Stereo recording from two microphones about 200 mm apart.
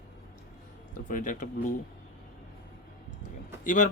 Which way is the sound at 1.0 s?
40° left (ahead or behind).